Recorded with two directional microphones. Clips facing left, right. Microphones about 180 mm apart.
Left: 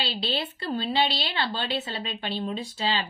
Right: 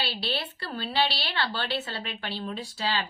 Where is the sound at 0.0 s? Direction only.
20° left (ahead or behind).